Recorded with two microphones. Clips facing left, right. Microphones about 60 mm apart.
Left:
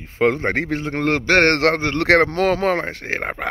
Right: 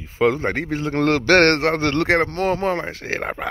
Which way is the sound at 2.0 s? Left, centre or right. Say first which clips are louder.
Left 7 dB; left.